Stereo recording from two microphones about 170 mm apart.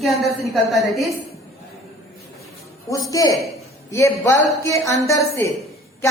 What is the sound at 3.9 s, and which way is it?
A woman's voice, 15° left (ahead or behind).